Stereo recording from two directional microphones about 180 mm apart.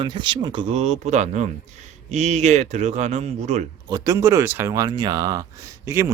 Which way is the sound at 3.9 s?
20° right (ahead or behind).